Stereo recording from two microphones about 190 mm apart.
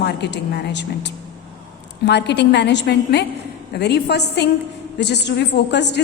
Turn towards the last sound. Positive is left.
turn(degrees=65)  # may be behind; listen again after turning